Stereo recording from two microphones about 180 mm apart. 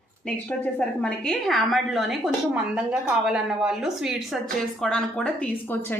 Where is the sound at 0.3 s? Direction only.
5° left (ahead or behind).